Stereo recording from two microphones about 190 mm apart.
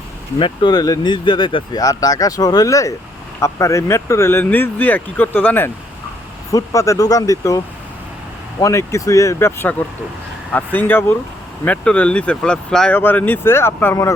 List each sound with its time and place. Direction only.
0.3 s speech: 25° left (ahead or behind)